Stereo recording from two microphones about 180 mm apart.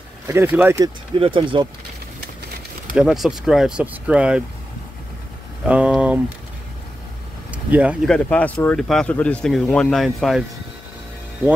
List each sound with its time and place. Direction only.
0.3 s speech: 10° right (ahead or behind)
0.7 s speech: 25° right (ahead or behind)
3.0 s speech: 5° right (ahead or behind)
5.7 s speech: 5° right (ahead or behind)
7.5 s vehicle: 5° right (ahead or behind)
8.1 s speech: 5° left (ahead or behind)